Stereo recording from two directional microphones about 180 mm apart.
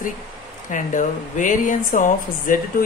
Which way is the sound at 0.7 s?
45° left (ahead or behind).